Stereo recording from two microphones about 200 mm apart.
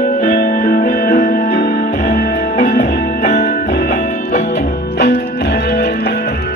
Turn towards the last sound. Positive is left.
turn(degrees=50)  # may be behind; listen again after turning